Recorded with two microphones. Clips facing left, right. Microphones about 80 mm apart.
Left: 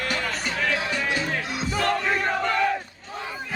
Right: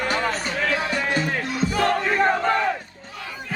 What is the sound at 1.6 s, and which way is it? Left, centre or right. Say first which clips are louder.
Music: right 4 dB; centre.